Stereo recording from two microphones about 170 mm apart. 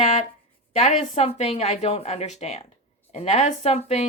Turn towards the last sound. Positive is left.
turn(degrees=40)  # may be behind; listen again after turning